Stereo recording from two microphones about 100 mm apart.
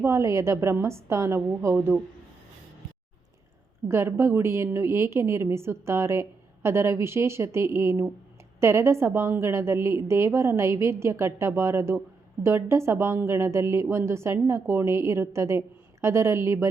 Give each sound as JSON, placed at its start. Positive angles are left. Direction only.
{"t": 0.0, "sound": "a woman's voice", "side_deg": -30}
{"t": 3.8, "sound": "a woman's voice", "side_deg": -25}